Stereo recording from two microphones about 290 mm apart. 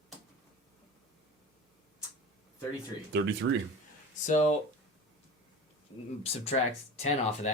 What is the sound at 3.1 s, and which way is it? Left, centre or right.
Speech, right.